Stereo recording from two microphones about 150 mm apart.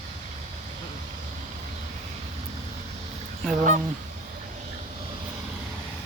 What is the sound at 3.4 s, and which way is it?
Speech, centre (ahead or behind).